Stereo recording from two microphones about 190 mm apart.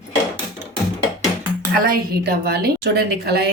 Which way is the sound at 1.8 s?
50° right (ahead or behind).